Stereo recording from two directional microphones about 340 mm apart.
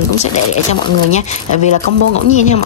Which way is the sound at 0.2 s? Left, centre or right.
Centre.